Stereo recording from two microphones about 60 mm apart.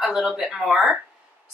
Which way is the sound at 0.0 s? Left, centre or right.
Centre.